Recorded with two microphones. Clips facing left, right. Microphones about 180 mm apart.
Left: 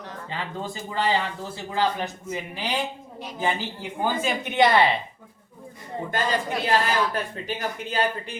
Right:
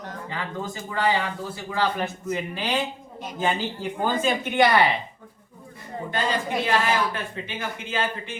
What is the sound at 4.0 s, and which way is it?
Speech, 10° left (ahead or behind).